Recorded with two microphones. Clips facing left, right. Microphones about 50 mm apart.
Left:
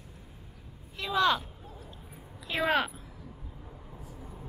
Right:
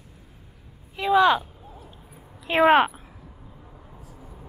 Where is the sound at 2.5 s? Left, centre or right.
Right.